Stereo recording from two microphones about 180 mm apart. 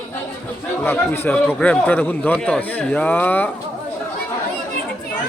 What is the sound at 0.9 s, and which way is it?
Speech, 10° left (ahead or behind).